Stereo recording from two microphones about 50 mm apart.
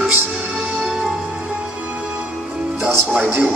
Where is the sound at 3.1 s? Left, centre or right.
Right.